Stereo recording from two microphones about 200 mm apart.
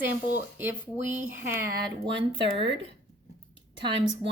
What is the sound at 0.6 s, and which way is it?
Speech, 10° right (ahead or behind).